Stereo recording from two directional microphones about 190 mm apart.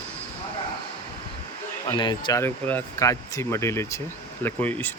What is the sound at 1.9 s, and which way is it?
Speech, 25° left (ahead or behind).